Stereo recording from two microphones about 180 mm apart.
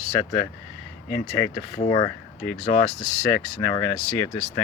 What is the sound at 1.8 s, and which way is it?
Speech, 25° left (ahead or behind).